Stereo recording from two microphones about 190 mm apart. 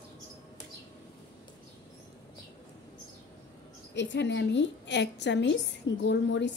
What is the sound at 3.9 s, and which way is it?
A woman's voice, 70° left (ahead or behind).